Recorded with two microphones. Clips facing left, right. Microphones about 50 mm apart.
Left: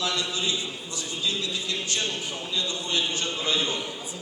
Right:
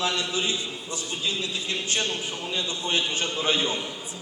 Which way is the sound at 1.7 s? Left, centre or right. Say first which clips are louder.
Right 3 dB; right.